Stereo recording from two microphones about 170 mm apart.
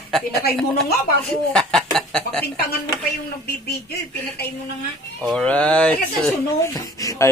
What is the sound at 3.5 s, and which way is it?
Speech, 70° left (ahead or behind).